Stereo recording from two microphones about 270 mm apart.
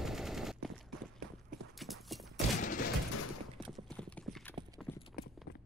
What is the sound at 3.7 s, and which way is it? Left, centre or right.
Clip-clop, centre.